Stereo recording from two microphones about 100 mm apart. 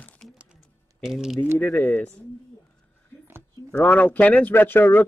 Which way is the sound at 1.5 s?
15° left (ahead or behind).